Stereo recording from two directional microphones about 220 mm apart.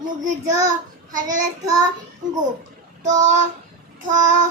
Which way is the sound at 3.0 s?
35° right (ahead or behind).